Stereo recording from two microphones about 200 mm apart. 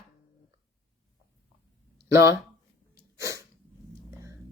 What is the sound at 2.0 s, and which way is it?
Speech, 15° right (ahead or behind).